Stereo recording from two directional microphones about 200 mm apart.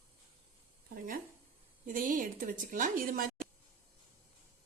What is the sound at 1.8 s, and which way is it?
Speech, 40° right (ahead or behind).